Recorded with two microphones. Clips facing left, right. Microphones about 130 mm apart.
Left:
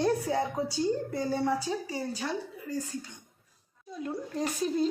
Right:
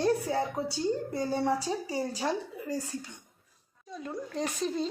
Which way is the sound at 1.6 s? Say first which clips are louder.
Right 1 dB; 35° right (ahead or behind).